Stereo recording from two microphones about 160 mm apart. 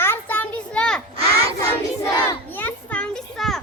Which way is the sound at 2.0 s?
15° left (ahead or behind).